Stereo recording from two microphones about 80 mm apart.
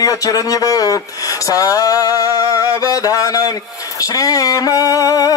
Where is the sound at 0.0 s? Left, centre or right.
Left.